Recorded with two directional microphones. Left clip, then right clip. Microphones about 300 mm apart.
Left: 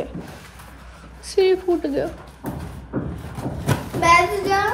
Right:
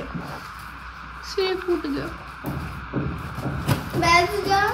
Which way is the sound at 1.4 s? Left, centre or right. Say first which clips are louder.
Left 6 dB; centre.